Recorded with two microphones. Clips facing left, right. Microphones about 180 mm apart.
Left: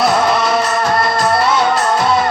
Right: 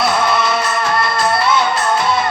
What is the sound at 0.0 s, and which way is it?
Music, 40° left (ahead or behind).